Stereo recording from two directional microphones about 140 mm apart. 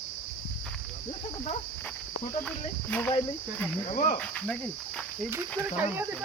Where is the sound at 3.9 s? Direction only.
70° left (ahead or behind).